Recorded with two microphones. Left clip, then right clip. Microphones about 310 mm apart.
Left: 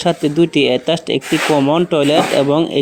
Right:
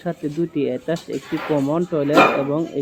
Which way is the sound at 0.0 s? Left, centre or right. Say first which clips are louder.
Left 10 dB; centre.